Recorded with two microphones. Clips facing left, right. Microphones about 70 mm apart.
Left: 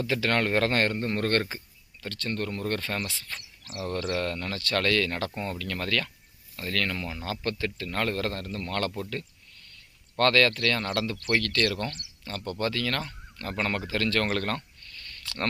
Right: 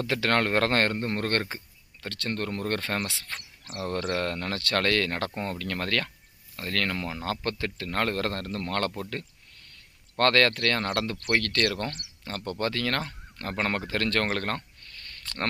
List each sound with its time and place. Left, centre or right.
0.0 s speech: right
9.0 s speech: right
14.3 s speech: right